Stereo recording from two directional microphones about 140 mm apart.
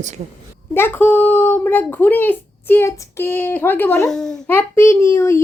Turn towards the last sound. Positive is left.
turn(degrees=20)  # may be behind; listen again after turning